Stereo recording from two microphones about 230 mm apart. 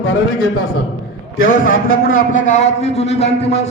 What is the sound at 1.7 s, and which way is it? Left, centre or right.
A man's voice, left.